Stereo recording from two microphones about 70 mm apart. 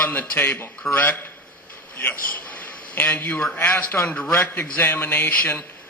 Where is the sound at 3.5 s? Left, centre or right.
Left.